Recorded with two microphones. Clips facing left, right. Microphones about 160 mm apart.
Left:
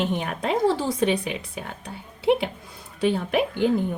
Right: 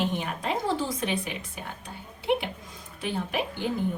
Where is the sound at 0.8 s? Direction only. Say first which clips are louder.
Left 7 dB; 65° left (ahead or behind).